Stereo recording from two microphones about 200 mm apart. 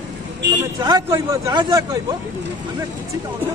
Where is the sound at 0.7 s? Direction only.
20° right (ahead or behind).